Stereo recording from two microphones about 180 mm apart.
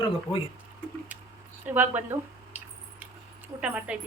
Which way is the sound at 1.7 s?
10° right (ahead or behind).